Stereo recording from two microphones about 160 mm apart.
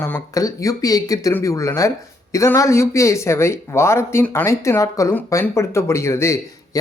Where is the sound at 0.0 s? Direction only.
20° left (ahead or behind).